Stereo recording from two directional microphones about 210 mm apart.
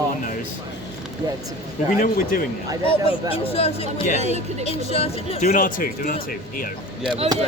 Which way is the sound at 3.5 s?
30° left (ahead or behind).